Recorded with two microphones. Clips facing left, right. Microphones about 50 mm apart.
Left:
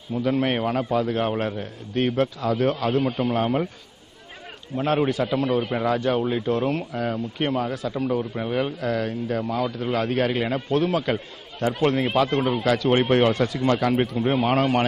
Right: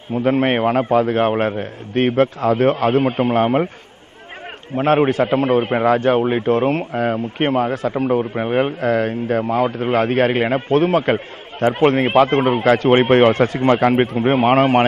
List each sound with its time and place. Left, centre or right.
0.1 s speech: right
4.7 s speech: right